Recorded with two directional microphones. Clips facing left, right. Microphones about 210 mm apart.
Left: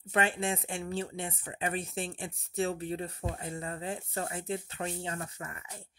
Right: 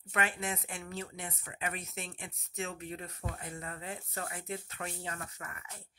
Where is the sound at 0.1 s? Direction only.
30° left (ahead or behind).